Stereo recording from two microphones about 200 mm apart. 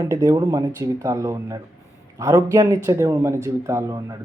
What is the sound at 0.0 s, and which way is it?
Speech, 15° right (ahead or behind).